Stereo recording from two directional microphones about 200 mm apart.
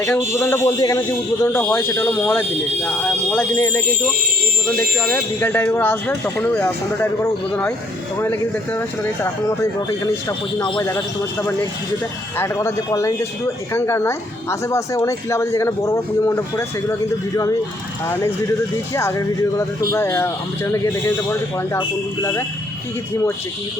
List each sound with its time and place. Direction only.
0.0 s speech: 10° left (ahead or behind)
4.9 s speech: 5° left (ahead or behind)
12.4 s speech: 15° left (ahead or behind)
18.9 s speech: 15° left (ahead or behind)